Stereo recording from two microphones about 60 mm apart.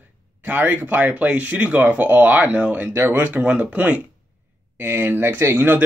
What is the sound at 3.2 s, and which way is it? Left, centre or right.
Speech, right.